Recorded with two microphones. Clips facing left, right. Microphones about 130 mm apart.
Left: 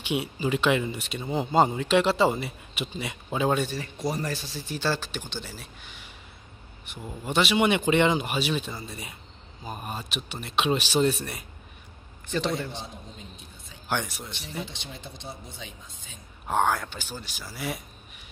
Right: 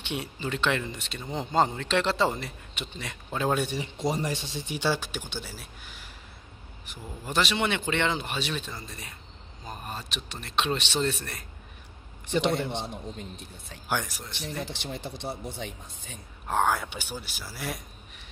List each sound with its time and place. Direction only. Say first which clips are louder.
0.0 s speech: left 5 dB; 10° left (ahead or behind)
3.6 s speech: right 1 dB; 15° right (ahead or behind); by 7.6 s 5° left (ahead or behind)
7.6 s speech: left 6 dB; 15° left (ahead or behind)
12.7 s speech: right 5 dB; 65° right (ahead or behind)
13.8 s speech: left 1 dB; centre (ahead or behind)
14.6 s speech: right 2 dB; 70° right (ahead or behind)
16.4 s speech: left 1 dB; centre (ahead or behind)